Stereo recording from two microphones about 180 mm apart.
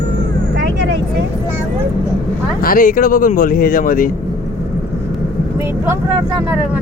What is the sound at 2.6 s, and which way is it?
Speech, 50° left (ahead or behind).